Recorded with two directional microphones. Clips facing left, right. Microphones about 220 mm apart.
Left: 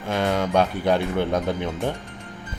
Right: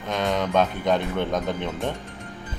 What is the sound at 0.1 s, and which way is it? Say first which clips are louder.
Speech: left 2 dB; 10° left (ahead or behind).